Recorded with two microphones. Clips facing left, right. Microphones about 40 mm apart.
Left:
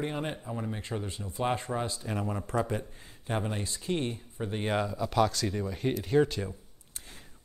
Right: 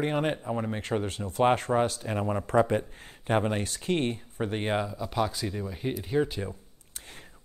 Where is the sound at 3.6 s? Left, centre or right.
Right.